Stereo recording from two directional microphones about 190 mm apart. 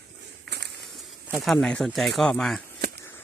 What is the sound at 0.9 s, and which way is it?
Speech, centre (ahead or behind).